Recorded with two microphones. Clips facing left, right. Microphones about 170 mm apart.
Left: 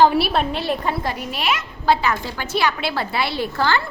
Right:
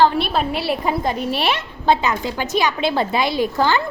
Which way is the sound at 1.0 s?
25° right (ahead or behind).